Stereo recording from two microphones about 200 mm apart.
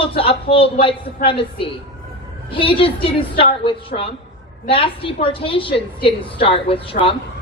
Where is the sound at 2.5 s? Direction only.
25° left (ahead or behind).